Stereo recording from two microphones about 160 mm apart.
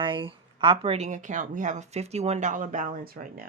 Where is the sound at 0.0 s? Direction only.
30° right (ahead or behind).